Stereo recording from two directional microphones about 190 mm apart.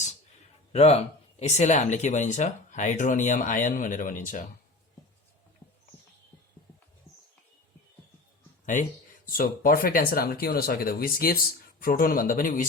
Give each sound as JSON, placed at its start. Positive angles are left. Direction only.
{"t": 0.7, "sound": "speech", "side_deg": 35}
{"t": 5.6, "sound": "rodents", "side_deg": 10}
{"t": 8.6, "sound": "speech", "side_deg": 40}